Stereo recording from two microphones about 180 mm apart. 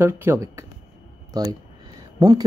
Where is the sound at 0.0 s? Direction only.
15° right (ahead or behind).